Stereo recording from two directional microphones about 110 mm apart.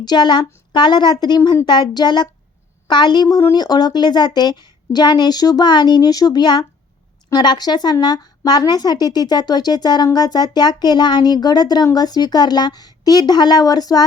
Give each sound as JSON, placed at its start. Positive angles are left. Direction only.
{"t": 0.0, "sound": "speech", "side_deg": 40}